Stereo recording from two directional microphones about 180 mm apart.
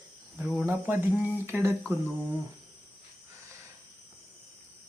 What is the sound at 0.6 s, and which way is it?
Speech, 10° right (ahead or behind).